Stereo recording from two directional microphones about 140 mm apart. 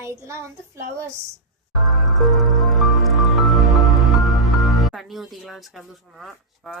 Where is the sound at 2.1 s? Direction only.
Centre (ahead or behind).